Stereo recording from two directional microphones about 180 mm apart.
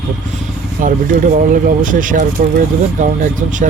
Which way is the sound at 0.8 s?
45° right (ahead or behind).